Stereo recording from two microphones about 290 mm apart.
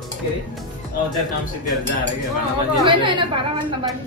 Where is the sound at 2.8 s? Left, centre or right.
Centre.